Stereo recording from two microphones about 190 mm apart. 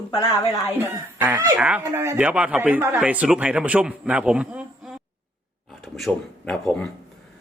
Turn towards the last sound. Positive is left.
turn(degrees=5)  # may be behind; listen again after turning